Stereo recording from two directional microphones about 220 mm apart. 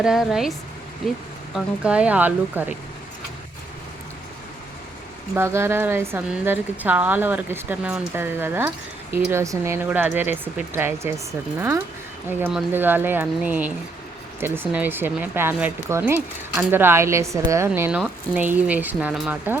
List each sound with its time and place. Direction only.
0.0 s speech: centre (ahead or behind)
1.5 s a woman's voice: 5° right (ahead or behind)
5.3 s a woman's voice: 10° right (ahead or behind)